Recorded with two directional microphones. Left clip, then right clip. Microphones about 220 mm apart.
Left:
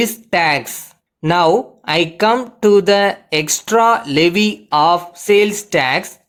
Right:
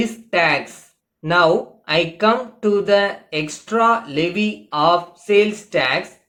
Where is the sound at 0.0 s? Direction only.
50° left (ahead or behind).